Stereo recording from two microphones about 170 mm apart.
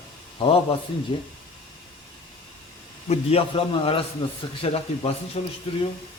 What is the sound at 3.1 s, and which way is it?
Speech, 35° left (ahead or behind).